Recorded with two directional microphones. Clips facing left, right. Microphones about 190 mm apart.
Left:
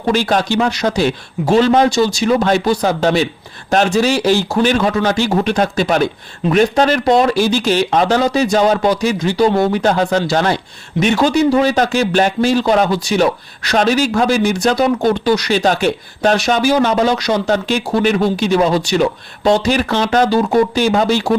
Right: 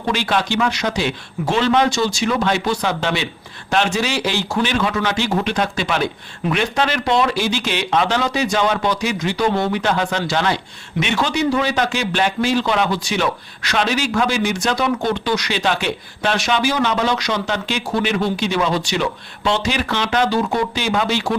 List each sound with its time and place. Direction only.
0.1 s speech: 40° left (ahead or behind)